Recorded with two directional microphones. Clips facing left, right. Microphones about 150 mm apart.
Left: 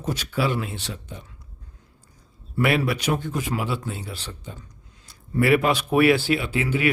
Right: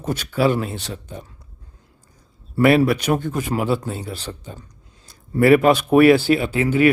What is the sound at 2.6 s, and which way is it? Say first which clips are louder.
A man's voice: right 7 dB; 40° right (ahead or behind).